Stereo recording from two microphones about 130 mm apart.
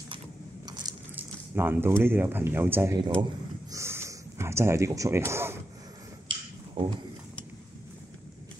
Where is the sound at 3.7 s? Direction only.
20° right (ahead or behind).